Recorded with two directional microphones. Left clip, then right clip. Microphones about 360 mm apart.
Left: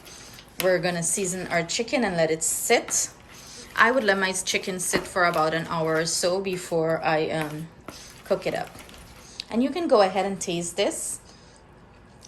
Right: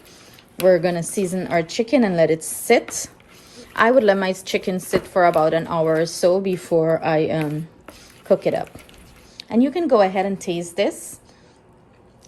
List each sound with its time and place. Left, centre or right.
0.6 s a woman's voice: centre